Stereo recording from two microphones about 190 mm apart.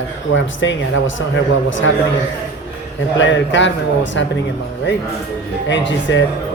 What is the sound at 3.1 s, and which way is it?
A man's voice, 75° left (ahead or behind).